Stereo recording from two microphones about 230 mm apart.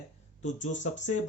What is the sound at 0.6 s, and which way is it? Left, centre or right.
Speech, left.